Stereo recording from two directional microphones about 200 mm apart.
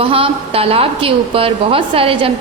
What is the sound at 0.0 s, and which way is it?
A woman's voice, 30° right (ahead or behind).